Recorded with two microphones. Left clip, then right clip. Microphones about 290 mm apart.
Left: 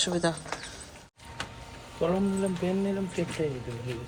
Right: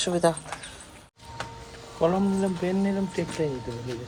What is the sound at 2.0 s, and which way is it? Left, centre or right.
Speech, right.